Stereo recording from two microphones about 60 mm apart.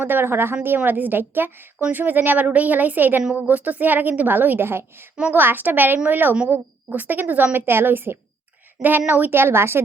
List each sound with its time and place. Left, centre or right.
0.0 s a woman's voice: right